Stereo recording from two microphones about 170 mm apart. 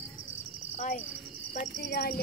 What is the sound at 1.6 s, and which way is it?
Speech, 75° left (ahead or behind).